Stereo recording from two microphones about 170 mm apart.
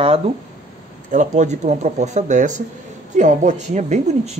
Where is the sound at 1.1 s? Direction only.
45° right (ahead or behind).